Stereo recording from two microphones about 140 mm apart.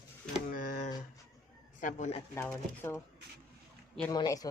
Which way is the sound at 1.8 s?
65° left (ahead or behind).